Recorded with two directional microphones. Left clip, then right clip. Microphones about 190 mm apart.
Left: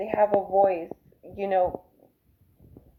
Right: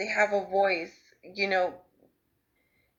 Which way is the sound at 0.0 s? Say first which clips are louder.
Left 3 dB; 30° right (ahead or behind).